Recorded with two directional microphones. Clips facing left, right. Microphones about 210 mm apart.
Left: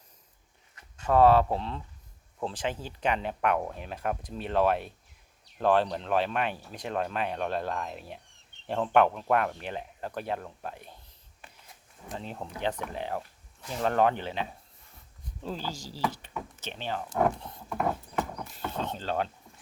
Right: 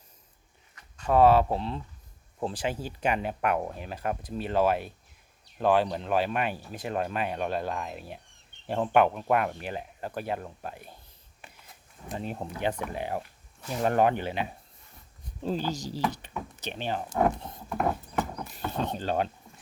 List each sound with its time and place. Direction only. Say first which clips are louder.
1.0 s speech: even; 10° right (ahead or behind)
12.1 s speech: right 3 dB; 10° right (ahead or behind)
15.4 s speech: right 6 dB; 20° right (ahead or behind)
17.3 s wood: right 2 dB; 20° right (ahead or behind)
18.4 s speech: right 3 dB; 15° right (ahead or behind)